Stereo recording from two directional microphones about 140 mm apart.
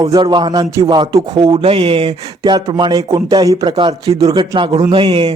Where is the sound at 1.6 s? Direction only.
40° right (ahead or behind).